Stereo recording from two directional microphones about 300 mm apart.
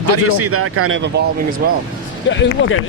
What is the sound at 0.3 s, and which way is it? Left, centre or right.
Speech, right.